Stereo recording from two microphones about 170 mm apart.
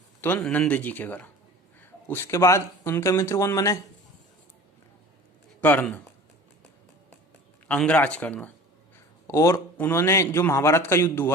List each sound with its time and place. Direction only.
0.2 s a man's voice: 10° left (ahead or behind)
5.5 s speech: 10° left (ahead or behind)
7.7 s a man's voice: 5° left (ahead or behind)